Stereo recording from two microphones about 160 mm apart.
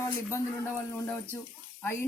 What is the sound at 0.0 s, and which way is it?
Speech, 15° left (ahead or behind).